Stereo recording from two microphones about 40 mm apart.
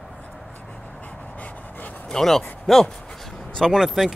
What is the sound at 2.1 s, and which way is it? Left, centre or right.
Speech, centre.